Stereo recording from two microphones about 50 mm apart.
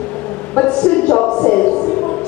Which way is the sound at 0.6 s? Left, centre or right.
Centre.